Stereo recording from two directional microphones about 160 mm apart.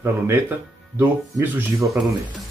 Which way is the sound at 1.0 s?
15° right (ahead or behind).